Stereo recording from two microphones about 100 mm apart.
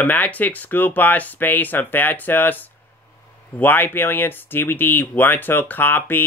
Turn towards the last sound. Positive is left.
turn(degrees=20)  # may be behind; listen again after turning